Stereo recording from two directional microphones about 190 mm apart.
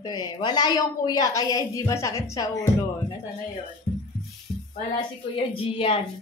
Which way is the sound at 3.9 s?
25° left (ahead or behind).